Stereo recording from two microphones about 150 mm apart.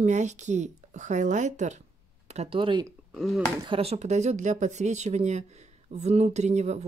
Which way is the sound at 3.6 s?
40° right (ahead or behind).